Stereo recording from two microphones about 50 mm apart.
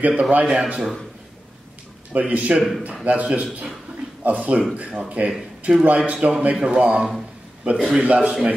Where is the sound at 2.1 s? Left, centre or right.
Right; by 8.0 s centre.